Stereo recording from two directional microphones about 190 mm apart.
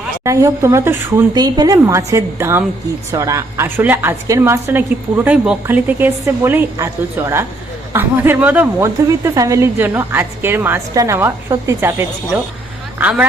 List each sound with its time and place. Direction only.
0.3 s a woman's voice: 15° right (ahead or behind)